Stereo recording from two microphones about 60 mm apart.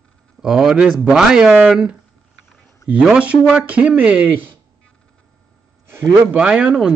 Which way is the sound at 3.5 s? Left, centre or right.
Right.